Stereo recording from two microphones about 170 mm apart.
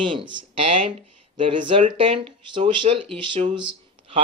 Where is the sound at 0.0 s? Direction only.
30° right (ahead or behind).